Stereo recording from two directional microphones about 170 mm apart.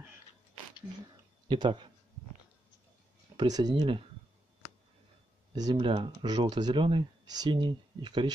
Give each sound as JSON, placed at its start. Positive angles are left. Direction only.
{"t": 1.5, "sound": "speech", "side_deg": -30}
{"t": 3.3, "sound": "speech", "side_deg": -20}
{"t": 5.5, "sound": "speech", "side_deg": -25}